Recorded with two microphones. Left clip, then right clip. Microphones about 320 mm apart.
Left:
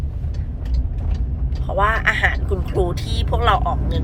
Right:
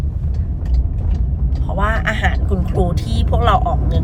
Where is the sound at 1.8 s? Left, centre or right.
Centre.